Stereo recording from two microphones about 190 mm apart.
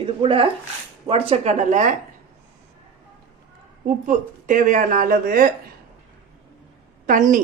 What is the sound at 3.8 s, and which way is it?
Speech, 40° right (ahead or behind).